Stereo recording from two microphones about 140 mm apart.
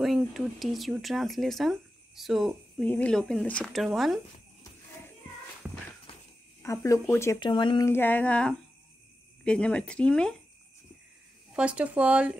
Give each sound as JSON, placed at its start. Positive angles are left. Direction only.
{"t": 0.0, "sound": "speech", "side_deg": 0}
{"t": 2.8, "sound": "speech", "side_deg": 10}
{"t": 6.6, "sound": "speech", "side_deg": 20}
{"t": 7.3, "sound": "speech", "side_deg": 35}
{"t": 7.8, "sound": "speech", "side_deg": 15}
{"t": 11.5, "sound": "speech", "side_deg": -10}